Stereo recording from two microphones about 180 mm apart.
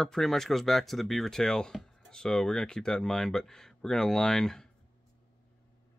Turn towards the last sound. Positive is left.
turn(degrees=5)  # may be behind; listen again after turning